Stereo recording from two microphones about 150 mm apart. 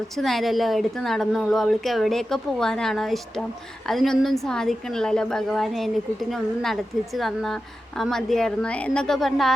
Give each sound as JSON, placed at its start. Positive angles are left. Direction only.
{"t": 0.2, "sound": "a woman's voice", "side_deg": 0}